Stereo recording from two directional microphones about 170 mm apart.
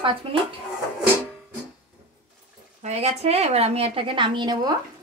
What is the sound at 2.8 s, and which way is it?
A woman's voice, 40° right (ahead or behind).